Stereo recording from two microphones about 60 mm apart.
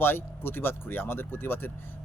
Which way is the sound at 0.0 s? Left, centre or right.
Left.